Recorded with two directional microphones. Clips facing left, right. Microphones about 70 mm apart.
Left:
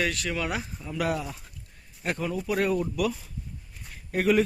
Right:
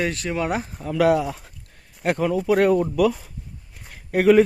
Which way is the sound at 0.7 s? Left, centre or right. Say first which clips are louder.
Right 13 dB; right.